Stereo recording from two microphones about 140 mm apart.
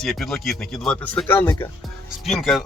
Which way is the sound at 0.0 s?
Centre (ahead or behind).